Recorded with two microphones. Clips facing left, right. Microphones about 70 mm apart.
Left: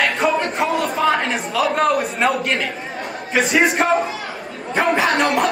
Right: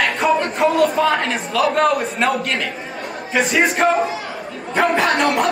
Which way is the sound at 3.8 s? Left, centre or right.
Centre.